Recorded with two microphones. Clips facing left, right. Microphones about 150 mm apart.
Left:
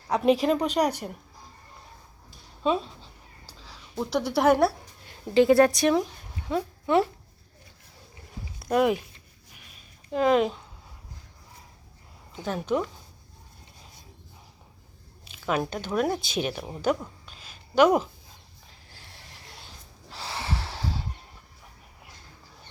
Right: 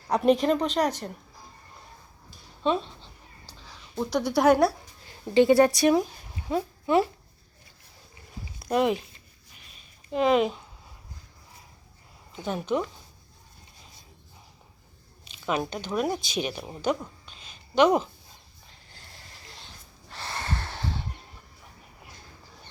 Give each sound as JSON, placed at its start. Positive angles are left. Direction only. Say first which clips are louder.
{"t": 0.1, "sound": "a woman's voice", "louder": "even", "side_deg": 0}
{"t": 2.6, "sound": "a woman's voice", "louder": "even", "side_deg": 5}
{"t": 8.7, "sound": "speech", "louder": "left 1 dB", "side_deg": 5}
{"t": 10.1, "sound": "speech", "louder": "even", "side_deg": -5}
{"t": 12.4, "sound": "speech", "louder": "left 1 dB", "side_deg": 0}
{"t": 15.3, "sound": "squish", "louder": "left 1 dB", "side_deg": 5}
{"t": 15.7, "sound": "a woman's voice", "louder": "left 1 dB", "side_deg": 10}
{"t": 16.0, "sound": "speech", "louder": "left 2 dB", "side_deg": 0}
{"t": 16.2, "sound": "speech", "louder": "left 1 dB", "side_deg": 50}
{"t": 16.5, "sound": "a woman's voice", "louder": "left 2 dB", "side_deg": 5}
{"t": 18.7, "sound": "a sound", "louder": "even", "side_deg": 5}